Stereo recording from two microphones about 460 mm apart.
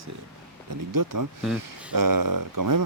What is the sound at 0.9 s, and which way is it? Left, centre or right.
Speech, right.